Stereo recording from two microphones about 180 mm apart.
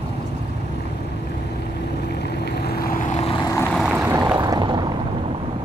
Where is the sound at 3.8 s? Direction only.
5° right (ahead or behind).